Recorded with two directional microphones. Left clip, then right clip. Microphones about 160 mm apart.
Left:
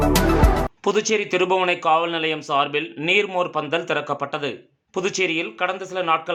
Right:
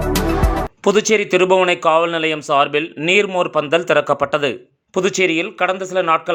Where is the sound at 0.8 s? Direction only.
35° right (ahead or behind).